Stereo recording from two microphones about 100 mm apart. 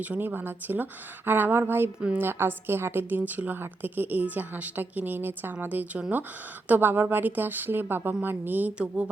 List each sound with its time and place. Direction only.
0.0 s a woman's voice: 15° right (ahead or behind)
2.0 s a woman's voice: 10° right (ahead or behind)
2.2 s a woman's voice: 20° right (ahead or behind)